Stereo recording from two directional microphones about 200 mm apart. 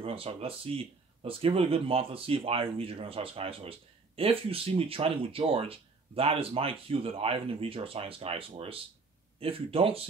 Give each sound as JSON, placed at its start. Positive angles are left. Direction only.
{"t": 0.0, "sound": "speech", "side_deg": -30}